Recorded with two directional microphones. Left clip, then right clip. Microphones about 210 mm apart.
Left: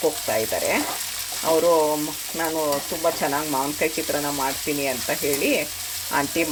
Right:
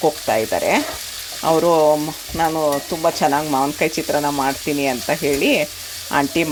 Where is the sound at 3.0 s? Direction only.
25° right (ahead or behind).